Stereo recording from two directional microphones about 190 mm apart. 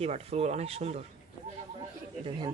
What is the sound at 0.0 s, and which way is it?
Speech, 30° right (ahead or behind).